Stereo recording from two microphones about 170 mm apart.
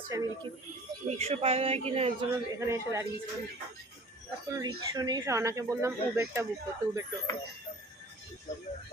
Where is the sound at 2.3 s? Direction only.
15° right (ahead or behind).